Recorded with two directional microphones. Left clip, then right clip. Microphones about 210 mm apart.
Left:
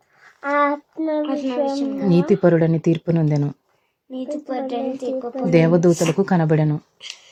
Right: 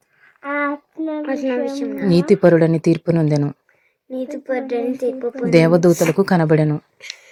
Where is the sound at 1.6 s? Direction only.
15° left (ahead or behind).